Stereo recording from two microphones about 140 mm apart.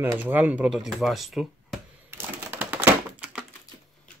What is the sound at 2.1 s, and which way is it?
Typewriter, 15° right (ahead or behind).